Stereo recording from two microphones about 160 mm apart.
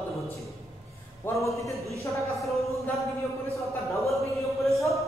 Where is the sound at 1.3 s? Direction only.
15° left (ahead or behind).